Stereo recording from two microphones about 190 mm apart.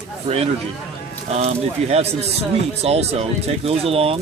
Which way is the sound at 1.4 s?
35° right (ahead or behind).